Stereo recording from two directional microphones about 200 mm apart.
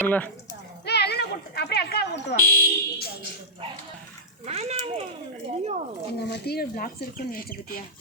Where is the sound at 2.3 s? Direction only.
55° left (ahead or behind).